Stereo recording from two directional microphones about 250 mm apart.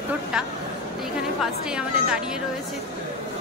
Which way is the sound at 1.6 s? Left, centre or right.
Centre.